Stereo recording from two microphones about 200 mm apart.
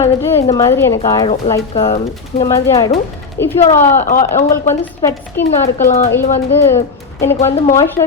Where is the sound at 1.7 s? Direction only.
30° left (ahead or behind).